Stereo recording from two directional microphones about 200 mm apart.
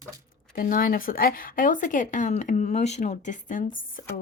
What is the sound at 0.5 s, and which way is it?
A woman's voice, 45° left (ahead or behind).